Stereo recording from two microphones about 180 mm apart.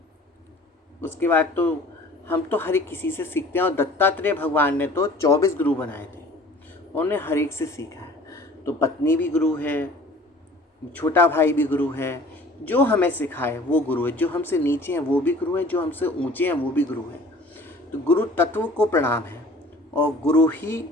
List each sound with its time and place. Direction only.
1.0 s a man's voice: 10° left (ahead or behind)
10.9 s speech: 10° left (ahead or behind)
18.0 s speech: 10° left (ahead or behind)